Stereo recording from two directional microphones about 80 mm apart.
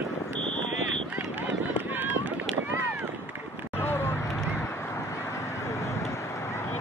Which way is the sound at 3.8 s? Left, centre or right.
Left.